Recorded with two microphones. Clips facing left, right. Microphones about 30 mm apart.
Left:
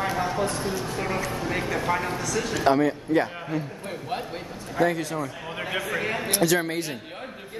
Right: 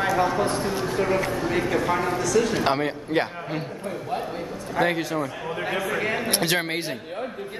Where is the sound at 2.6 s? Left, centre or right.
Right.